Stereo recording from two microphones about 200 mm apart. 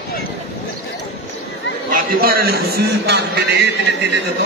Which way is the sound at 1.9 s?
50° right (ahead or behind).